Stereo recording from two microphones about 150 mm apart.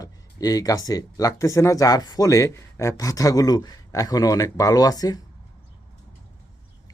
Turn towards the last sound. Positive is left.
turn(degrees=25)  # may be behind; listen again after turning